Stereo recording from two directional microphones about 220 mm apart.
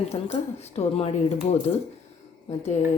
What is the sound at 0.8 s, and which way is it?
A woman's voice, 25° left (ahead or behind).